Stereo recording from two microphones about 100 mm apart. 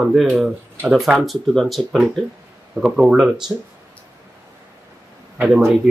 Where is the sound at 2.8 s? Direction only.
5° right (ahead or behind).